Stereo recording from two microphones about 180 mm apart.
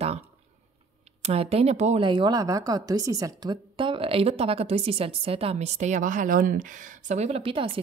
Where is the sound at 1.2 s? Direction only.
35° right (ahead or behind).